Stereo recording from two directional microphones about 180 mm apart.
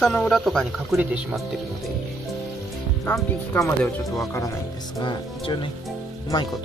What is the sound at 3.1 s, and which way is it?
Speech, 10° left (ahead or behind).